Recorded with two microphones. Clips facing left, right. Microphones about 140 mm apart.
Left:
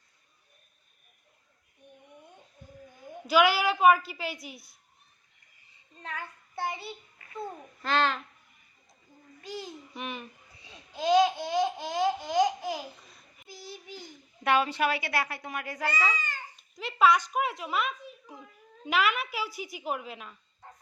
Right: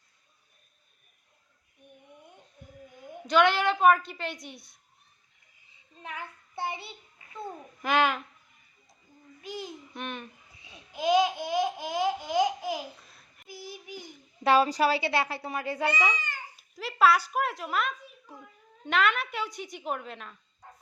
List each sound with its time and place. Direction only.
3.2 s speech: 5° left (ahead or behind)
6.0 s child singing: 15° right (ahead or behind)
7.8 s a child's voice: 15° right (ahead or behind)
9.4 s babbling: 15° right (ahead or behind)
9.9 s a sound: centre (ahead or behind)
10.6 s babbling: 15° right (ahead or behind)
13.1 s a sound: centre (ahead or behind)
13.5 s child singing: 10° right (ahead or behind)
14.4 s speech: 35° right (ahead or behind); by 16.4 s 15° right (ahead or behind)
16.6 s a child's voice: centre (ahead or behind)